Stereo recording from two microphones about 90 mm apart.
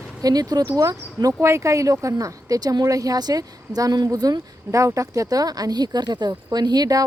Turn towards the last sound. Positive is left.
turn(degrees=-45)  # may be behind; listen again after turning